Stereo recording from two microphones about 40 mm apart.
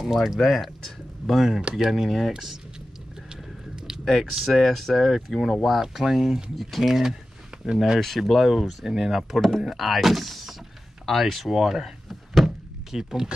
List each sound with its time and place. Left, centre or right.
0.0 s speech: centre
3.7 s a sound: centre
4.0 s speech: centre
6.5 s speech: centre
6.8 s speech: centre
7.5 s a sound: right
8.2 s speech: centre